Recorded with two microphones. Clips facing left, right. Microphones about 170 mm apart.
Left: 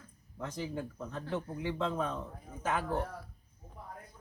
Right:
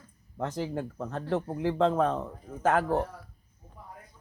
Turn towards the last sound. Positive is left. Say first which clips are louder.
# right 8 dB
turn(degrees=-85)